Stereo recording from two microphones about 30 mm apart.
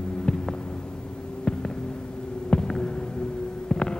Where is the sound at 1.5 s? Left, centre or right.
Left.